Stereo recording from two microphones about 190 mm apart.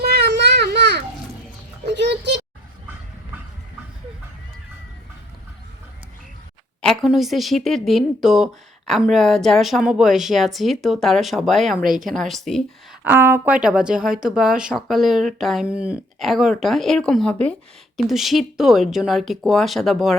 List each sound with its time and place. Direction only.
0.0 s children playing: 60° right (ahead or behind)
2.0 s a sound: 65° right (ahead or behind)
6.8 s speech: centre (ahead or behind)
13.1 s speech: 10° right (ahead or behind)